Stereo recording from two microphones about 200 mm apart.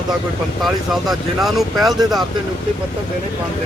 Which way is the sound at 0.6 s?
Centre (ahead or behind).